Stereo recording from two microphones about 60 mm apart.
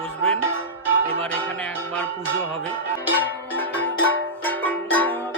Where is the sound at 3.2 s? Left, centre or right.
Left.